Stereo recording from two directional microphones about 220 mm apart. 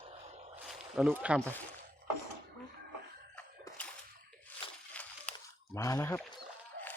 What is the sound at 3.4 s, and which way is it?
Splash, 5° left (ahead or behind).